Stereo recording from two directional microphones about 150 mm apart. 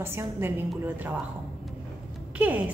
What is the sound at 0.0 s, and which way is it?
A woman's voice, 15° right (ahead or behind).